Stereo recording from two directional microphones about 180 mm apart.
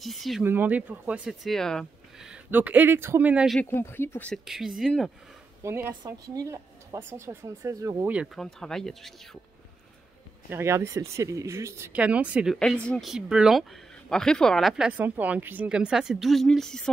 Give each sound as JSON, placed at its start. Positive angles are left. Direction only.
{"t": 0.0, "sound": "speech", "side_deg": 0}
{"t": 0.4, "sound": "speech", "side_deg": -10}
{"t": 3.6, "sound": "speech", "side_deg": 15}
{"t": 4.5, "sound": "speech", "side_deg": 0}
{"t": 5.6, "sound": "speech", "side_deg": -15}
{"t": 8.1, "sound": "speech", "side_deg": -5}
{"t": 10.5, "sound": "speech", "side_deg": -15}
{"t": 12.5, "sound": "speech", "side_deg": 5}